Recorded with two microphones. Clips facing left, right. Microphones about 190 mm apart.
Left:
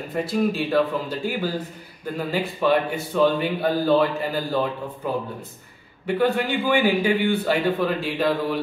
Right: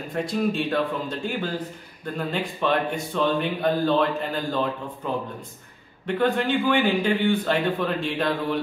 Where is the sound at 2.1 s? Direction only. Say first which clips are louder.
Left 2 dB; 5° left (ahead or behind).